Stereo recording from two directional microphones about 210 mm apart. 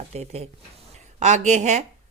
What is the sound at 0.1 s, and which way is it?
A woman's voice, 30° right (ahead or behind).